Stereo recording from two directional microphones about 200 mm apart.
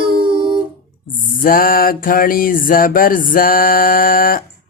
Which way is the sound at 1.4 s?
45° left (ahead or behind).